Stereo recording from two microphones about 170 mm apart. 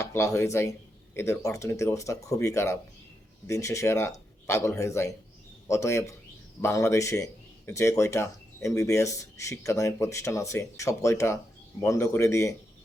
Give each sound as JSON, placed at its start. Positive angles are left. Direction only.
{"t": 0.0, "sound": "speech", "side_deg": 15}